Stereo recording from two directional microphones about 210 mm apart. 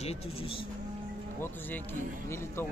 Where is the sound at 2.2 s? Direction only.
10° left (ahead or behind).